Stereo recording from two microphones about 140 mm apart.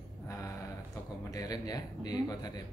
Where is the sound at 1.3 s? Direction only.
25° left (ahead or behind).